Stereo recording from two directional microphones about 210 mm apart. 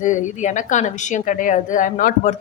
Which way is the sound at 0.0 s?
35° left (ahead or behind).